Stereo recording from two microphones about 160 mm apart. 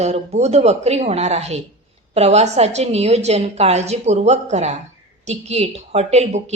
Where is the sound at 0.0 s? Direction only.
45° right (ahead or behind).